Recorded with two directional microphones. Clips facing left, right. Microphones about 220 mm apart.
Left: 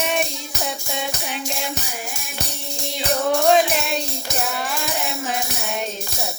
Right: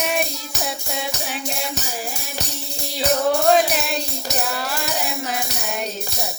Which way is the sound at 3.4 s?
Centre (ahead or behind).